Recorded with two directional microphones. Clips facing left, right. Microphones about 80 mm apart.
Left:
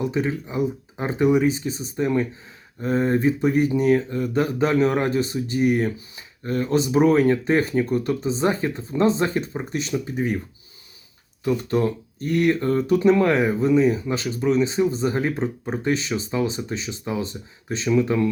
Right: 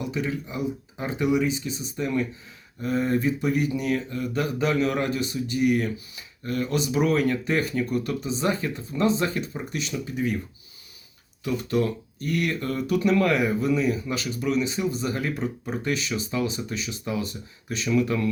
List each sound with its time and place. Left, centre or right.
0.0 s speech: left
11.4 s speech: left